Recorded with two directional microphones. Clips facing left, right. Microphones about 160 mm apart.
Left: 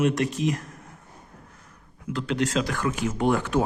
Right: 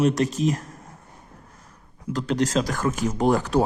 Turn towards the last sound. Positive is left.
turn(degrees=-35)  # may be behind; listen again after turning